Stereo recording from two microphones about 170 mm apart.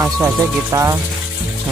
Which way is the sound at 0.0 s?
15° right (ahead or behind).